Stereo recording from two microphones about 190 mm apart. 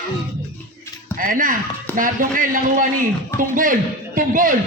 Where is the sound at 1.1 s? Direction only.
45° right (ahead or behind).